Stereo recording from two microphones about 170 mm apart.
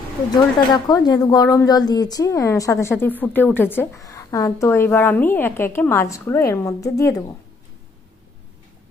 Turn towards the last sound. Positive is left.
turn(degrees=20)  # may be behind; listen again after turning